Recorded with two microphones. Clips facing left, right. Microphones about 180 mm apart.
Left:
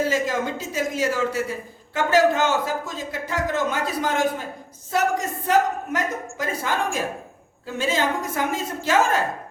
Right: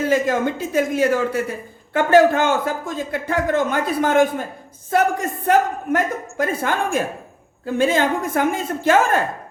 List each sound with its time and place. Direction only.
0.1 s speech: 55° right (ahead or behind)